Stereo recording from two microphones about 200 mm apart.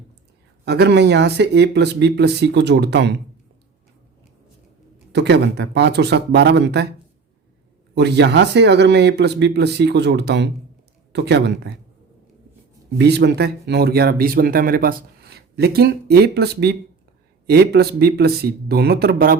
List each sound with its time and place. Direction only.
0.6 s speech: 55° right (ahead or behind)
5.1 s speech: 55° right (ahead or behind)
7.9 s speech: 60° right (ahead or behind)
13.0 s speech: 55° right (ahead or behind)